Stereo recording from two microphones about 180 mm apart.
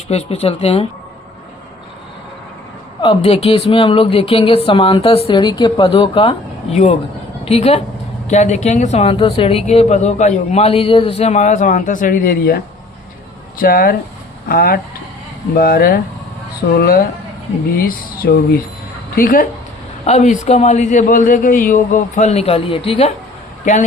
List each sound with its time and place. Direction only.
0.1 s speech: 35° left (ahead or behind)
3.0 s speech: 30° left (ahead or behind); by 19.5 s 50° left (ahead or behind)
20.1 s speech: 40° left (ahead or behind)